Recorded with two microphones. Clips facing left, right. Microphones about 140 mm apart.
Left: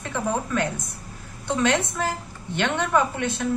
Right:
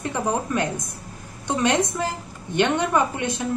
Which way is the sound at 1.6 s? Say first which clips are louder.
Right 1 dB; 15° right (ahead or behind).